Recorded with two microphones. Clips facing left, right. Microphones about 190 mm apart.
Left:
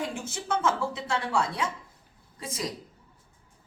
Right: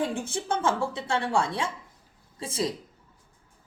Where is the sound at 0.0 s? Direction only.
30° right (ahead or behind).